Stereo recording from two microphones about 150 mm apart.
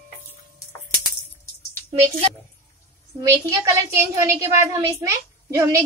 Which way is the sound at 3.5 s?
20° right (ahead or behind).